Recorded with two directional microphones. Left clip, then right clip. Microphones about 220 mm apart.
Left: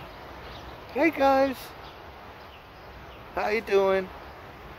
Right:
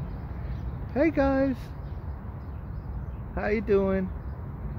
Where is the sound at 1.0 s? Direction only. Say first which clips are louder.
Left 3 dB; 20° left (ahead or behind).